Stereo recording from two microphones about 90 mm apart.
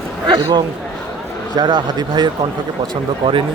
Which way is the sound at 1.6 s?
55° right (ahead or behind).